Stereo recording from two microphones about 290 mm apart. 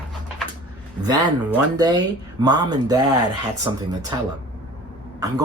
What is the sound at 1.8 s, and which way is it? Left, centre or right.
Speech, centre.